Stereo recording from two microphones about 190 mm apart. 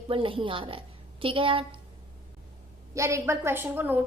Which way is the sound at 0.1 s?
30° right (ahead or behind).